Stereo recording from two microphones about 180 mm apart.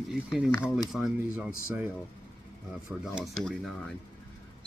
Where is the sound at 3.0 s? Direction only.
Centre (ahead or behind).